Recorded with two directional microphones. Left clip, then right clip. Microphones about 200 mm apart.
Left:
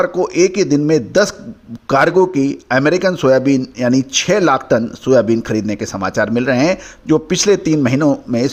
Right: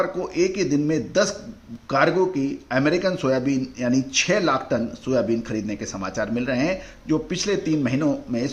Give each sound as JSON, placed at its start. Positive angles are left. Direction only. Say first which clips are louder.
{"t": 0.0, "sound": "speech", "louder": "left 9 dB", "side_deg": 50}